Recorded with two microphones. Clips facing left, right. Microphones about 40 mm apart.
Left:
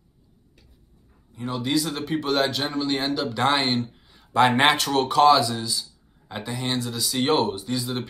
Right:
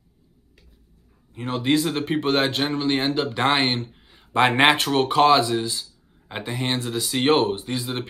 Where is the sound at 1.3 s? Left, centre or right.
Right.